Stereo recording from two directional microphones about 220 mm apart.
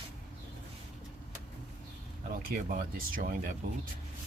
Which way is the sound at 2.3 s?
40° right (ahead or behind).